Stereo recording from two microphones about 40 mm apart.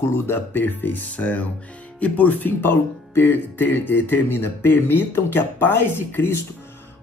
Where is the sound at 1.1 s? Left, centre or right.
Left.